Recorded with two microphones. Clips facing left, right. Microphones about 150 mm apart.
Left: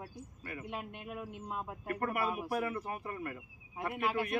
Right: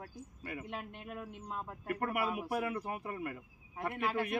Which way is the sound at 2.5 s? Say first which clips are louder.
Even; 15° right (ahead or behind).